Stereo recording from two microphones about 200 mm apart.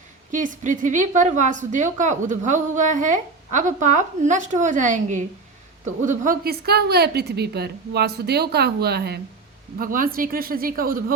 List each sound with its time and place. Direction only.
0.3 s a woman's voice: 40° right (ahead or behind)
6.2 s a woman's voice: 50° right (ahead or behind)